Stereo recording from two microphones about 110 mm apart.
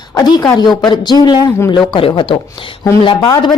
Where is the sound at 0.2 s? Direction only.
35° left (ahead or behind).